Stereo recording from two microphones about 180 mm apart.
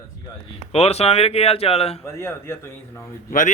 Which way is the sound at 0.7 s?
35° left (ahead or behind).